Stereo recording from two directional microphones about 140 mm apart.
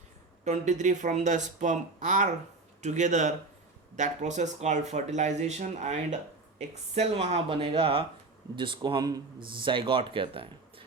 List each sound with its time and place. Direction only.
0.4 s speech: 55° right (ahead or behind); by 10.8 s 40° right (ahead or behind)